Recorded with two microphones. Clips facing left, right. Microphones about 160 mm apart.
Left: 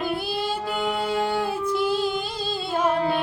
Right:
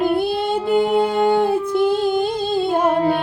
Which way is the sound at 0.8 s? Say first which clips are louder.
Right 8 dB; 55° right (ahead or behind).